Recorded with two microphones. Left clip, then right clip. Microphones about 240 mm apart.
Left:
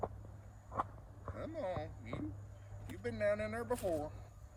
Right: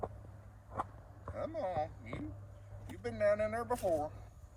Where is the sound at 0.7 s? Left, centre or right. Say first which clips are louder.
Left 1 dB; right.